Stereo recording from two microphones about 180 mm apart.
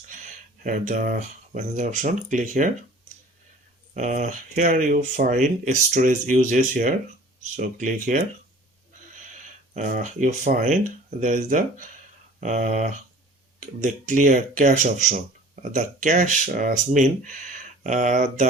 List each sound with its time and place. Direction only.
0.6 s speech: 45° right (ahead or behind)
3.9 s speech: 40° right (ahead or behind)
9.7 s speech: 45° right (ahead or behind)